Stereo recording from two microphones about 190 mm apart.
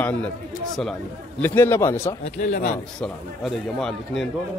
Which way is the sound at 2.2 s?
40° left (ahead or behind).